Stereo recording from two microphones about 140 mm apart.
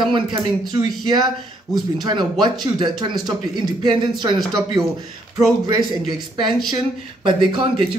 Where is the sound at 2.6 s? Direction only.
30° right (ahead or behind).